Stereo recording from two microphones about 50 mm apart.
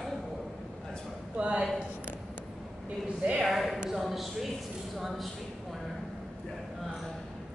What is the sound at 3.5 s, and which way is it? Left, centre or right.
A man's voice, centre.